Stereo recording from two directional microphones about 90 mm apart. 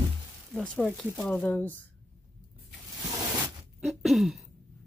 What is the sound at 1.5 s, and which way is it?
Speech, 20° left (ahead or behind).